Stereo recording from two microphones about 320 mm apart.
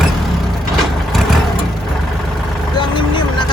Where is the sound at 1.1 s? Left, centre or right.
Centre.